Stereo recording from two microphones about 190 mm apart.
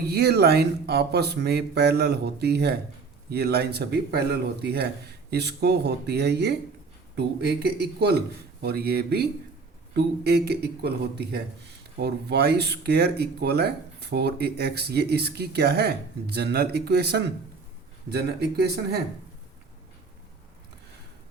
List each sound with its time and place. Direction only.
0.1 s speech: 60° right (ahead or behind)